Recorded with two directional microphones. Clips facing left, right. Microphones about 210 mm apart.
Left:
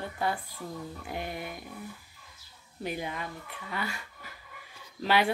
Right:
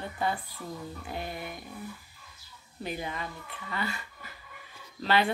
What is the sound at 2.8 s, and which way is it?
Speech, 10° left (ahead or behind).